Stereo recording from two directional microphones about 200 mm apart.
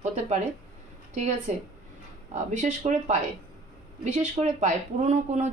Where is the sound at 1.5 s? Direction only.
35° right (ahead or behind).